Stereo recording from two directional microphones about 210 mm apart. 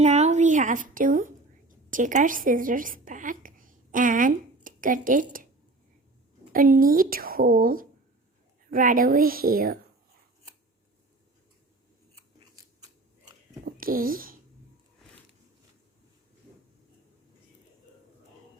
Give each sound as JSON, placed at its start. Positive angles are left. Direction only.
{"t": 0.0, "sound": "a woman's voice", "side_deg": -30}
{"t": 6.5, "sound": "a woman's voice", "side_deg": -40}
{"t": 12.4, "sound": "scissors", "side_deg": -15}
{"t": 13.7, "sound": "speech", "side_deg": -45}